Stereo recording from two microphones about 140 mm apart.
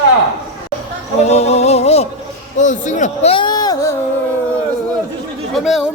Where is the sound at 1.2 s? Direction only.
50° left (ahead or behind).